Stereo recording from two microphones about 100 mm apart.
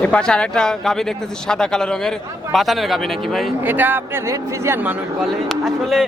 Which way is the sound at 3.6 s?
20° right (ahead or behind).